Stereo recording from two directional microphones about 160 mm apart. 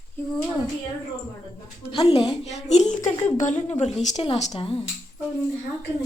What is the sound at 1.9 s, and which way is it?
A woman's voice, 35° left (ahead or behind).